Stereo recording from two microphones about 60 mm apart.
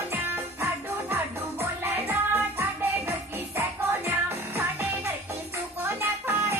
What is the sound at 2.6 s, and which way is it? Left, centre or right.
Music, right.